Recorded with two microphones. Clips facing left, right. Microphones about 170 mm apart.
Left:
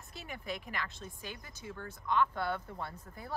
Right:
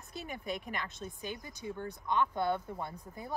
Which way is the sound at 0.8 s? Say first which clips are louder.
Right 4 dB; 20° right (ahead or behind).